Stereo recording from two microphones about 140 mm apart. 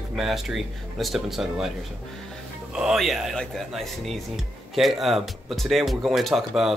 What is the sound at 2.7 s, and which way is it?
Speech, 5° right (ahead or behind).